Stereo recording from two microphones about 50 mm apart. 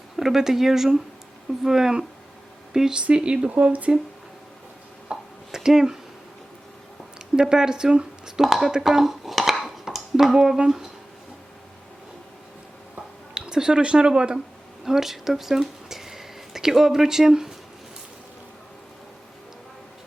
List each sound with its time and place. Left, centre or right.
0.2 s speech: centre
3.0 s speech: right
3.5 s speech: right
5.1 s a sound: centre
5.5 s speech: centre
7.3 s speech: centre
8.4 s speech: centre
9.6 s a sound: centre
13.3 s speech: centre
14.8 s speech: centre